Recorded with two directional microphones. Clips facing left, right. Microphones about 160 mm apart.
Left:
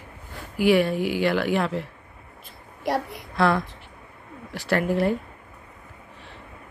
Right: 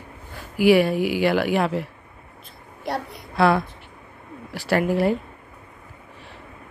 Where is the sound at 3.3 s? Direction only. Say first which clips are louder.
Right 3 dB; 5° right (ahead or behind).